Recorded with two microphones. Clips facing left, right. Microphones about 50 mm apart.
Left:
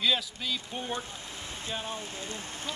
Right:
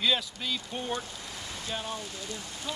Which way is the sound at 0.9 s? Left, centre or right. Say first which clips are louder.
Right 1 dB; left.